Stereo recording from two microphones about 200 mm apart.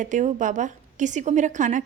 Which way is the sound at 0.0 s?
40° right (ahead or behind).